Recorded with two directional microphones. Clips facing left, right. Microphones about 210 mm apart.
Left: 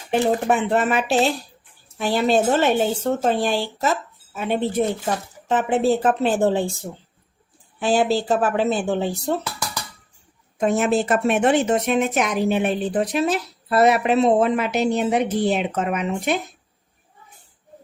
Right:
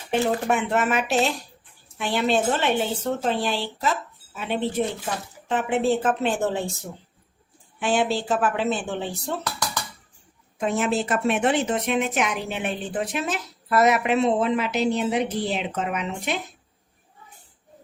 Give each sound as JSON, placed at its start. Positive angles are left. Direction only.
{"t": 0.1, "sound": "a woman's voice", "side_deg": 35}
{"t": 10.6, "sound": "speech", "side_deg": 45}